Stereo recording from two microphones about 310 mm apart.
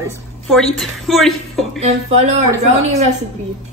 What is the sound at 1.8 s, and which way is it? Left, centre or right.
Speech, right.